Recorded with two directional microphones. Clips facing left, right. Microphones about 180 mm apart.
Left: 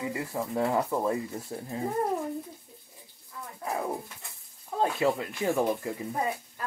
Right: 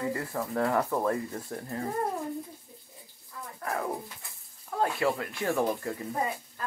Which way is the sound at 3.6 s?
15° left (ahead or behind).